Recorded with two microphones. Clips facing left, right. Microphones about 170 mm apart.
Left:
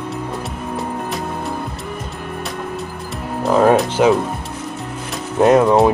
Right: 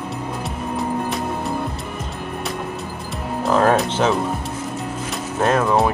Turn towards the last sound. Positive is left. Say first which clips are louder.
# left 6 dB
turn(degrees=15)  # may be behind; listen again after turning